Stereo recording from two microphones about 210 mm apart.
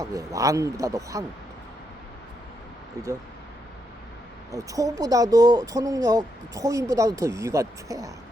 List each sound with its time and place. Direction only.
0.0 s speech: 15° right (ahead or behind)
4.5 s speech: 15° right (ahead or behind)